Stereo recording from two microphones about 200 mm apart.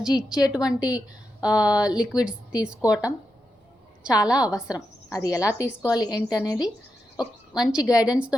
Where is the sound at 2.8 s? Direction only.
15° left (ahead or behind).